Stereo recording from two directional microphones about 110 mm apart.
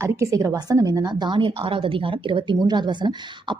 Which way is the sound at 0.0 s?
25° right (ahead or behind).